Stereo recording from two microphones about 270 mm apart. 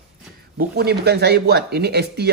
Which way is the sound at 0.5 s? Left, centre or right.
Right.